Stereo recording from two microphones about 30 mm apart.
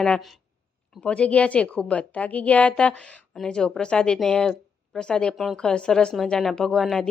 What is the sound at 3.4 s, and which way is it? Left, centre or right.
A woman's voice, left.